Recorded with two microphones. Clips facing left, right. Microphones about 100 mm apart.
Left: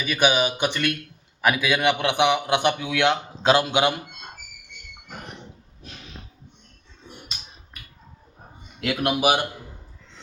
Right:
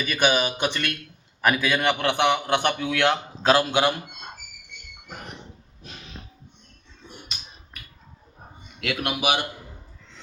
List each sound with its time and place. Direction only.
0.1 s a man's voice: 15° left (ahead or behind)
9.0 s speech: 35° left (ahead or behind)